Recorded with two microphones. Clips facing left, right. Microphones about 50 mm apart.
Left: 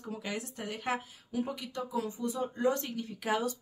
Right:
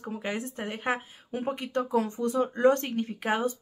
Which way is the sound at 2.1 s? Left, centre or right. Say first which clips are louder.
Right 7 dB; right.